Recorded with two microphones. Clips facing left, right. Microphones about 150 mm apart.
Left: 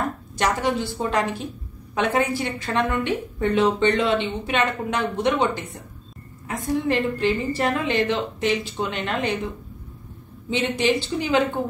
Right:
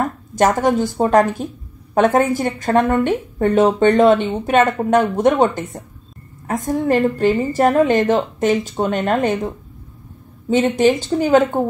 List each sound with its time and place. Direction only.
0.4 s a woman's voice: 45° right (ahead or behind)
10.5 s a woman's voice: 45° right (ahead or behind)